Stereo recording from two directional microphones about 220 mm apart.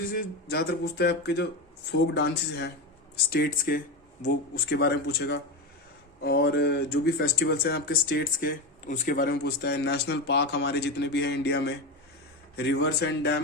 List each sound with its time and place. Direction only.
0.1 s speech: 40° left (ahead or behind)